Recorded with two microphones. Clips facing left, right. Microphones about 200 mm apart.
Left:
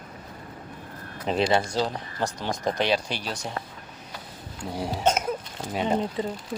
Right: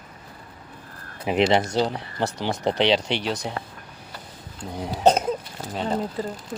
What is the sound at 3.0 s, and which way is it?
Speech, 75° right (ahead or behind).